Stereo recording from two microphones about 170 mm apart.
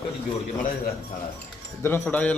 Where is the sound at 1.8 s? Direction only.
10° left (ahead or behind).